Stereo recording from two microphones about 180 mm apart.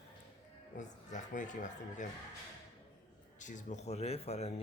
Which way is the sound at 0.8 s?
45° left (ahead or behind).